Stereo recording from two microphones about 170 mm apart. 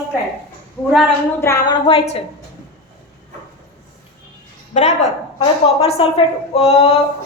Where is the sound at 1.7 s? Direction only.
35° left (ahead or behind).